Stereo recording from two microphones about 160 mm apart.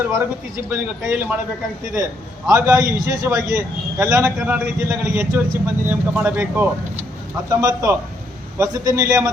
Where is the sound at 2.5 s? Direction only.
20° right (ahead or behind).